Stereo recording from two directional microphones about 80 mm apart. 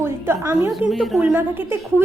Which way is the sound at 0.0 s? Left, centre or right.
Right.